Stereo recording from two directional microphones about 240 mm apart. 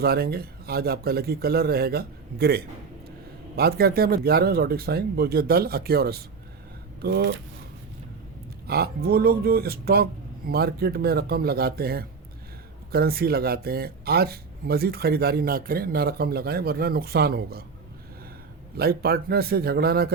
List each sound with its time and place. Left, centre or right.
0.0 s speech: right
8.6 s speech: right
18.8 s speech: right